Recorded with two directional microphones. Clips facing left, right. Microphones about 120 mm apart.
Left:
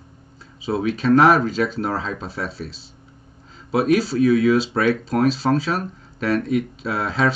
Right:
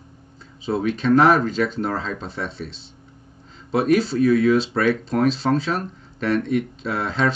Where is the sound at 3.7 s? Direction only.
5° left (ahead or behind).